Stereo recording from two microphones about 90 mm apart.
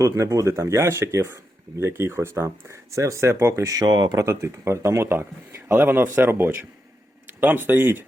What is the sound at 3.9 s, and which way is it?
Speech, 60° right (ahead or behind).